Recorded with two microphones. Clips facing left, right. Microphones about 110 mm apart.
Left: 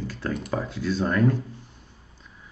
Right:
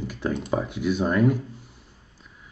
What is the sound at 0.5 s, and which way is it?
Speech, 15° right (ahead or behind).